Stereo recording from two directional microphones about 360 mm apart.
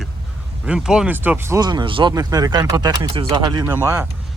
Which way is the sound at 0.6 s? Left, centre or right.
Centre.